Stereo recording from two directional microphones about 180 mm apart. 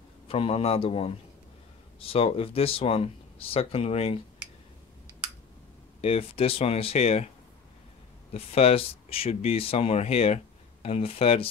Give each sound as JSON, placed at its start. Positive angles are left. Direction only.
{"t": 0.3, "sound": "speech", "side_deg": 30}
{"t": 5.9, "sound": "speech", "side_deg": 35}
{"t": 8.3, "sound": "speech", "side_deg": 35}